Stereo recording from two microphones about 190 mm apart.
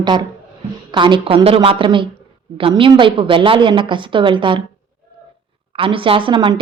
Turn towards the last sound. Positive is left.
turn(degrees=-25)  # may be behind; listen again after turning